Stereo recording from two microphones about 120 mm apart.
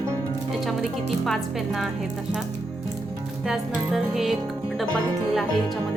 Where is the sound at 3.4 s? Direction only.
5° right (ahead or behind).